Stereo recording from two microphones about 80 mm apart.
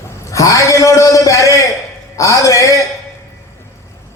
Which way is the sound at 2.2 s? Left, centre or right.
Left.